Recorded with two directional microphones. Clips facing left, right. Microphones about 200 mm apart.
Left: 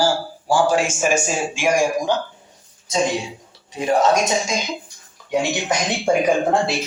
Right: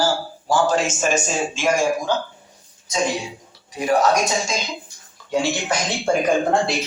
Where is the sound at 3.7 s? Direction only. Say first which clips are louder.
Left 1 dB; 25° left (ahead or behind).